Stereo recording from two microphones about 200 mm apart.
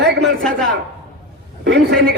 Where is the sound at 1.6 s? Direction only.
65° right (ahead or behind).